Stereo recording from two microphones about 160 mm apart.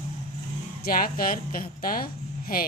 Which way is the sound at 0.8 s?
65° left (ahead or behind).